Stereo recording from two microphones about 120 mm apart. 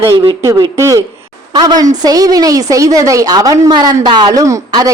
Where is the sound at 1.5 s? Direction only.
35° right (ahead or behind).